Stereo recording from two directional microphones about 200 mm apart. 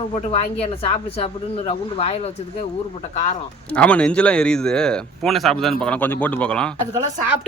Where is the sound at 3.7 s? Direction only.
5° left (ahead or behind).